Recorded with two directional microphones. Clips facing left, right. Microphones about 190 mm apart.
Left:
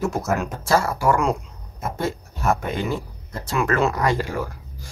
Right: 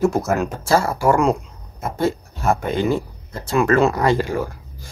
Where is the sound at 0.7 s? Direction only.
30° right (ahead or behind).